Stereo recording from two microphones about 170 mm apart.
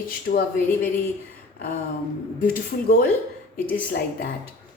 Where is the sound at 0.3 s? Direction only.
60° left (ahead or behind).